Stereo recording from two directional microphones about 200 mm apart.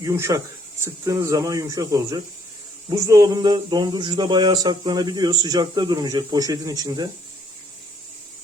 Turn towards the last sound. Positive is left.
turn(degrees=-20)  # may be behind; listen again after turning